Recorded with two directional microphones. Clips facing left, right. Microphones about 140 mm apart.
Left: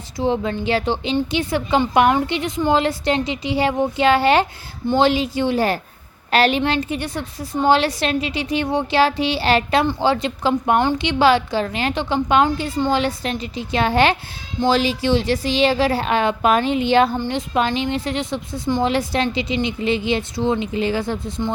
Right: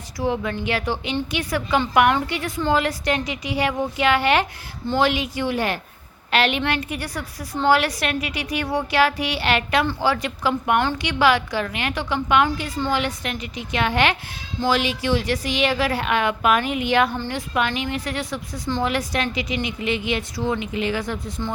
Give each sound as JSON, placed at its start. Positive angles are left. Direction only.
{"t": 0.2, "sound": "a woman's voice", "side_deg": 30}
{"t": 6.6, "sound": "a woman's voice", "side_deg": 25}